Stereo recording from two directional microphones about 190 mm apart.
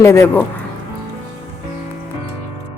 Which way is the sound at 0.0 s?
15° left (ahead or behind).